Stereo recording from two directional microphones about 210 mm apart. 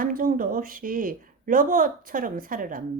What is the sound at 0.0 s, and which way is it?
Speech, 40° right (ahead or behind).